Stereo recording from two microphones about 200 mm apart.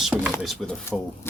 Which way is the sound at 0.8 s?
10° left (ahead or behind).